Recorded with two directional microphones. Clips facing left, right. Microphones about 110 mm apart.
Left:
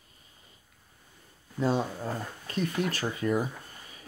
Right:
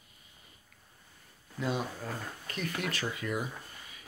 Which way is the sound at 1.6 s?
30° left (ahead or behind).